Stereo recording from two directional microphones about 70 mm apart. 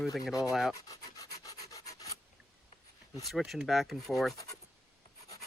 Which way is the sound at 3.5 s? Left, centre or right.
Centre.